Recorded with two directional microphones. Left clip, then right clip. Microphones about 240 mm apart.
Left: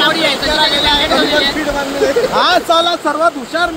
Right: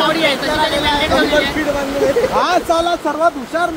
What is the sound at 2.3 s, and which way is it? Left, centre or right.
Speech, centre.